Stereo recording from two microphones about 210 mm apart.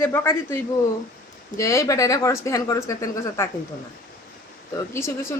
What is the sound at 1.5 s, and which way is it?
A woman's voice, 15° left (ahead or behind).